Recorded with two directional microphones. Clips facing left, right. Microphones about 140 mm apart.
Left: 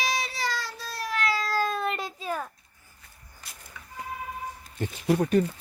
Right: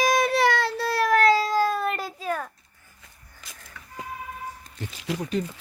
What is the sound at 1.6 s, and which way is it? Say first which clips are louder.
Child singing: right 4 dB; 5° right (ahead or behind).